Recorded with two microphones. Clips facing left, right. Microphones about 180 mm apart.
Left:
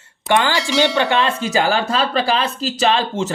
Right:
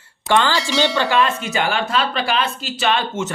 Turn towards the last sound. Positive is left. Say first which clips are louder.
# left 3 dB
turn(degrees=35)  # may be behind; listen again after turning